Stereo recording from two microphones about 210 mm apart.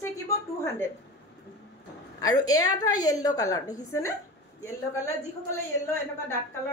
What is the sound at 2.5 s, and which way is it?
A woman's voice, 15° left (ahead or behind).